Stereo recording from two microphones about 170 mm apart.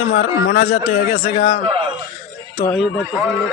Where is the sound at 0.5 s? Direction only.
50° left (ahead or behind).